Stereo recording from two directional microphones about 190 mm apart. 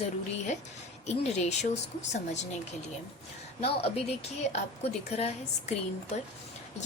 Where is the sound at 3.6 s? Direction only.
30° left (ahead or behind).